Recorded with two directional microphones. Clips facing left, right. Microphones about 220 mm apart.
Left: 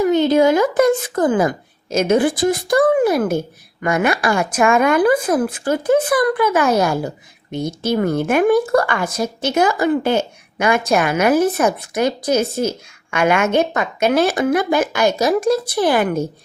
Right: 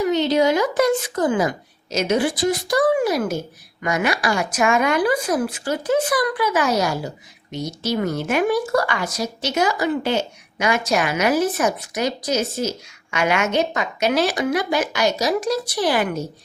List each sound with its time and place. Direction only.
0.0 s speech: 50° left (ahead or behind)